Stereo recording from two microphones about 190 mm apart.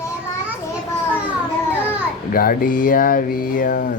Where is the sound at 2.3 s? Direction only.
50° left (ahead or behind).